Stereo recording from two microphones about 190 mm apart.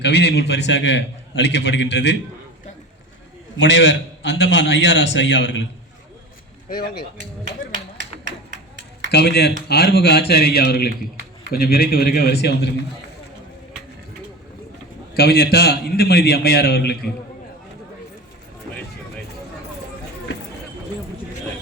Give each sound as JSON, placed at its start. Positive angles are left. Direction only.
{"t": 0.0, "sound": "a man's voice", "side_deg": 60}
{"t": 3.6, "sound": "a man's voice", "side_deg": 70}
{"t": 6.7, "sound": "speech", "side_deg": 50}
{"t": 9.0, "sound": "a man's voice", "side_deg": 60}
{"t": 15.1, "sound": "a man's voice", "side_deg": 55}